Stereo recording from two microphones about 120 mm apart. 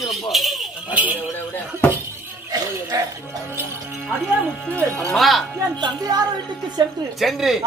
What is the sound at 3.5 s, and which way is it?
Speech, 15° right (ahead or behind).